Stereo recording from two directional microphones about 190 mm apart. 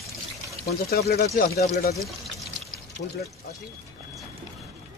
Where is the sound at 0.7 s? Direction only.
55° left (ahead or behind).